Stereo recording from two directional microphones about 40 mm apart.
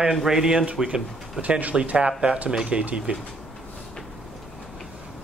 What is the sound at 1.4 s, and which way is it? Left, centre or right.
Speech, right.